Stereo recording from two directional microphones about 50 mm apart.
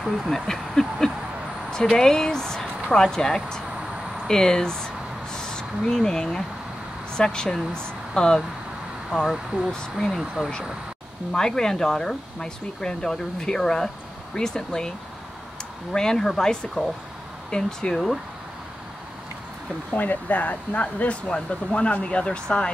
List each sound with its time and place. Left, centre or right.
0.0 s speech: centre
9.1 s speech: centre
11.3 s speech: centre
17.9 s speech: centre
19.9 s speech: left